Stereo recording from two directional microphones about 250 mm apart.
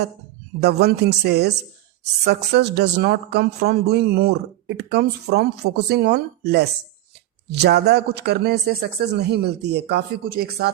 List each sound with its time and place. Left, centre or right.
0.6 s a man's voice: right